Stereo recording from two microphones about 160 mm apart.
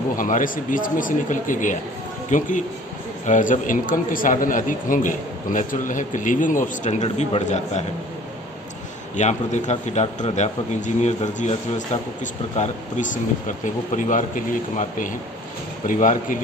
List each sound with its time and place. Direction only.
0.2 s speech: 55° left (ahead or behind)
9.1 s speech: 50° left (ahead or behind)